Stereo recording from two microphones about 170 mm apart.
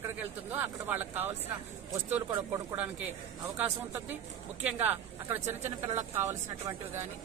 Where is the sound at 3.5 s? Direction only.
10° right (ahead or behind).